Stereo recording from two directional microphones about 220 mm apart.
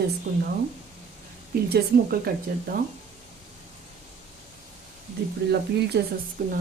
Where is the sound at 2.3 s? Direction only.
40° right (ahead or behind).